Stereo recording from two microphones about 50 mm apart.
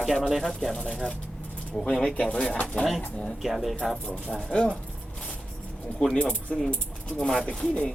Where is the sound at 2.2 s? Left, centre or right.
Left.